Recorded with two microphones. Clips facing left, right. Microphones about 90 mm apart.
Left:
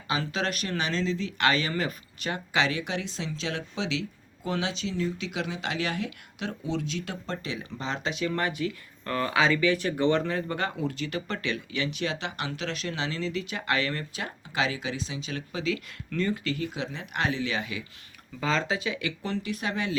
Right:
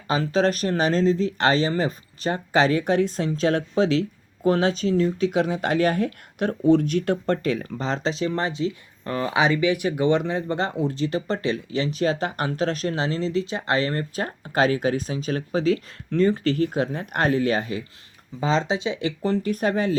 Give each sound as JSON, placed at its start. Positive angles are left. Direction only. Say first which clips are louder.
{"t": 0.1, "sound": "speech", "louder": "right 8 dB", "side_deg": -35}
{"t": 18.3, "sound": "speech", "louder": "right 5 dB", "side_deg": -25}